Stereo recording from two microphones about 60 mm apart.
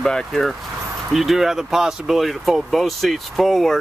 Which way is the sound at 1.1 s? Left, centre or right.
Centre.